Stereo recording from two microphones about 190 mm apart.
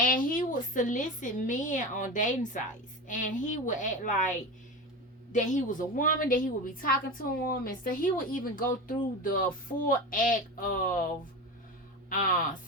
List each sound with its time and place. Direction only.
0.0 s a woman's voice: 45° left (ahead or behind)
5.3 s a woman's voice: 40° left (ahead or behind)
12.0 s speech: 45° left (ahead or behind)